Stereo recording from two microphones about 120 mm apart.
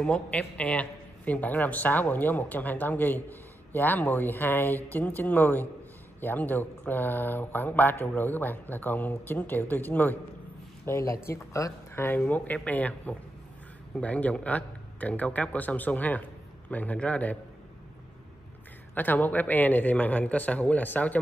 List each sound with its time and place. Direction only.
0.0 s a man's voice: 10° left (ahead or behind)
18.9 s a man's voice: 15° left (ahead or behind)